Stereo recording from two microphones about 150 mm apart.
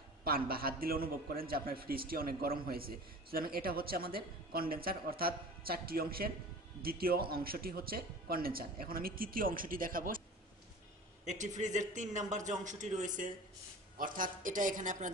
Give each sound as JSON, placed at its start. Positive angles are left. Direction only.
{"t": 0.2, "sound": "a man's voice", "side_deg": -80}
{"t": 11.2, "sound": "a man's voice", "side_deg": -55}